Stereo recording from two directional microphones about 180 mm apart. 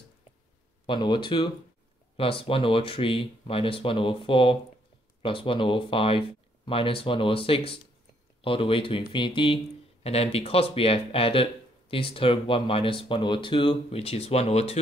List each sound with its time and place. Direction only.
0.8 s speech: 25° left (ahead or behind)